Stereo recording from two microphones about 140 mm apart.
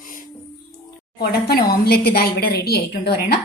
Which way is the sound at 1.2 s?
90° left.